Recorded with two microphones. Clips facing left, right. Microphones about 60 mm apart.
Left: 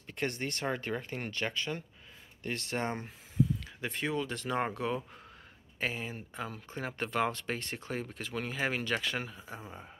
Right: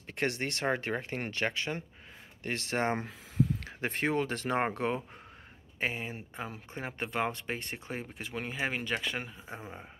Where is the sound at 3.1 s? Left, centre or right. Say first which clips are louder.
Even; right.